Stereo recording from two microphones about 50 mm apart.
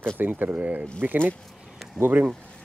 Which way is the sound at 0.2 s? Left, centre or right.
Right.